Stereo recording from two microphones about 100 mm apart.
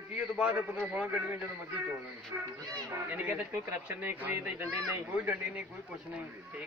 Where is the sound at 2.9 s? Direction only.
15° right (ahead or behind).